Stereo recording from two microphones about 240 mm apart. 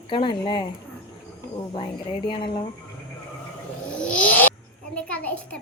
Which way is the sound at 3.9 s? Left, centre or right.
Centre.